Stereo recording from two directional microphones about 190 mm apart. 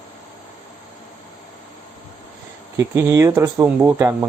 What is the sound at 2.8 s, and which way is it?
Speech, 15° right (ahead or behind).